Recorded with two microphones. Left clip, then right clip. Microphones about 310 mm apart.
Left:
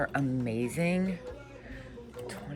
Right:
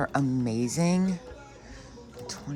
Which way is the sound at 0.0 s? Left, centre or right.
Centre.